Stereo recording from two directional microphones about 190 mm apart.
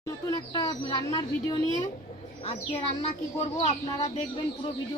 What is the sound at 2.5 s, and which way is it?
Speech, 30° left (ahead or behind).